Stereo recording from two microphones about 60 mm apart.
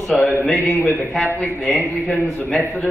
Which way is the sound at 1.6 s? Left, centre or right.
Centre.